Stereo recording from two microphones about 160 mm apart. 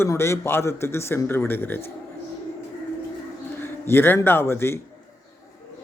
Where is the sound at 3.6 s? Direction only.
15° left (ahead or behind).